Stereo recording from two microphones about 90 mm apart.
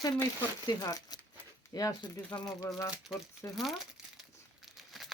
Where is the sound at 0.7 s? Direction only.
45° left (ahead or behind).